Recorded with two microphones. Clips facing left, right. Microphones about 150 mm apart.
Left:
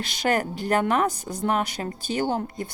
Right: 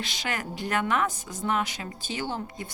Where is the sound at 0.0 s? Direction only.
45° left (ahead or behind).